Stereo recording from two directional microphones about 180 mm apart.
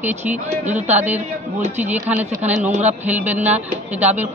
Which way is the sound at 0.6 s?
40° right (ahead or behind).